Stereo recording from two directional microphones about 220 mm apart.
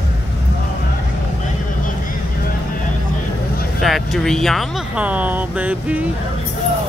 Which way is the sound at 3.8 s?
Centre (ahead or behind).